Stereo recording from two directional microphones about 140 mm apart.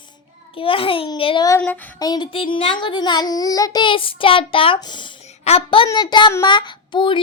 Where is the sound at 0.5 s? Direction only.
40° left (ahead or behind).